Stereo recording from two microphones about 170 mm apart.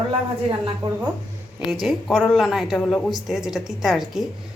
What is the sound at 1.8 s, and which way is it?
Speech, 5° left (ahead or behind).